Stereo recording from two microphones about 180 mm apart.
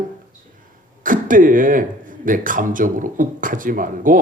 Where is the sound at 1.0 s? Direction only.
50° right (ahead or behind).